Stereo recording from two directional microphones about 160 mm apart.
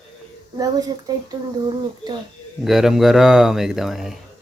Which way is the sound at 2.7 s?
Centre (ahead or behind).